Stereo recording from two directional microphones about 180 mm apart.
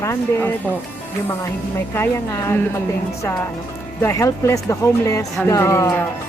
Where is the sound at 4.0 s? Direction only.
15° left (ahead or behind).